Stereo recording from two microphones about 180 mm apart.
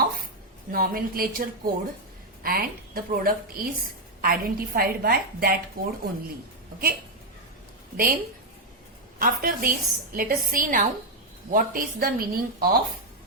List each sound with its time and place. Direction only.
0.7 s a woman's voice: 55° right (ahead or behind)
7.9 s a woman's voice: 55° right (ahead or behind)